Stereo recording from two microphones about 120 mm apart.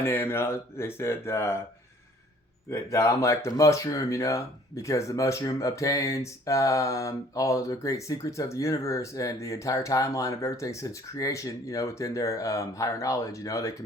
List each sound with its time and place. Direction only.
0.0 s speech: 20° left (ahead or behind)
2.6 s speech: 25° left (ahead or behind)